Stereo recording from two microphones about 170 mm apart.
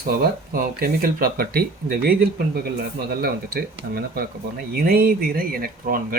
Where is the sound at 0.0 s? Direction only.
55° right (ahead or behind).